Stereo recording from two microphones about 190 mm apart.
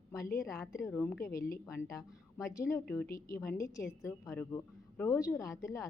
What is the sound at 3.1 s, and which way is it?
Speech, 50° left (ahead or behind).